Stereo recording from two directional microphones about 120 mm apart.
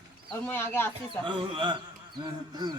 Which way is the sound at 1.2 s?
45° right (ahead or behind).